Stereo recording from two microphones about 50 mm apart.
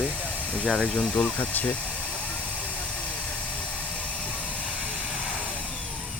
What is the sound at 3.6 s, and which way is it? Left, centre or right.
Vehicle, left.